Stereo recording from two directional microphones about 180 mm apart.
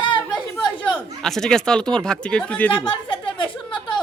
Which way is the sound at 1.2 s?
5° left (ahead or behind).